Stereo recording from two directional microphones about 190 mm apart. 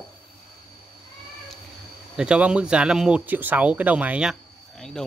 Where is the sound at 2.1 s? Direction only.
5° right (ahead or behind).